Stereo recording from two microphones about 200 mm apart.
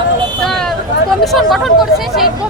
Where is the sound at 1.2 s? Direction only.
Centre (ahead or behind).